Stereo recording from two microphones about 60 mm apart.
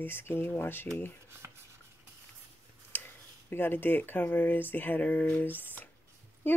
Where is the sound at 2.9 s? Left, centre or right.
Left.